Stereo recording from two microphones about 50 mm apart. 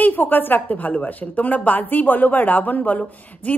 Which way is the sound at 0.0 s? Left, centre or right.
Left.